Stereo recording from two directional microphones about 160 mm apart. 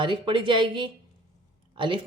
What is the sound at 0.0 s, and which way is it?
Speech, 30° right (ahead or behind).